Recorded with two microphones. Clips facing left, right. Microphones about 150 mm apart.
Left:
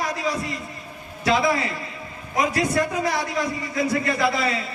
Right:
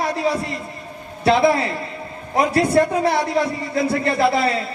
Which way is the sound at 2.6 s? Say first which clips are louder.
Right 6 dB; 30° right (ahead or behind).